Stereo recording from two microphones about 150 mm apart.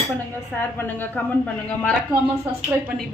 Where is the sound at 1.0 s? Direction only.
10° left (ahead or behind).